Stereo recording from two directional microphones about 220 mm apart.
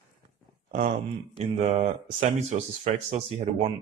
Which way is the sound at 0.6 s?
35° right (ahead or behind).